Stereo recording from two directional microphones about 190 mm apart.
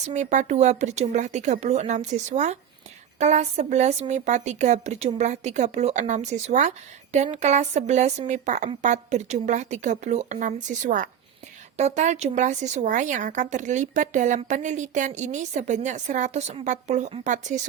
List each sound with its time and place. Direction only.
0.1 s speech: 40° right (ahead or behind)